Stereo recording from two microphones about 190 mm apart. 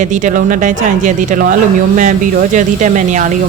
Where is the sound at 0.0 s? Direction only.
40° right (ahead or behind).